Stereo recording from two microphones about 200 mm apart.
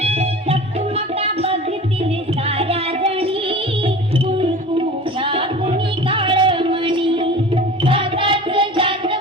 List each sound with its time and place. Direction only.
0.0 s music: 30° right (ahead or behind)
2.6 s music: 30° right (ahead or behind)
5.2 s music: 25° right (ahead or behind)